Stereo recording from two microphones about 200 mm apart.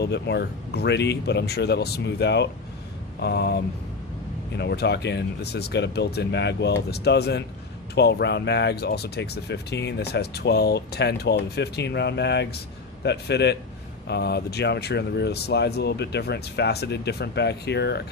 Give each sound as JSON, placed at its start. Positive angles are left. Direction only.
{"t": 0.0, "sound": "speech", "side_deg": 55}